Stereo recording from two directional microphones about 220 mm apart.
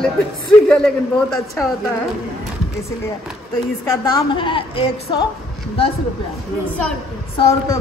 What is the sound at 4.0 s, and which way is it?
Speech, 20° left (ahead or behind).